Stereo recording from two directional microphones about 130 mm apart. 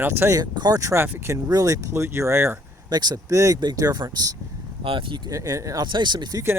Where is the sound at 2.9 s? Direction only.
30° right (ahead or behind).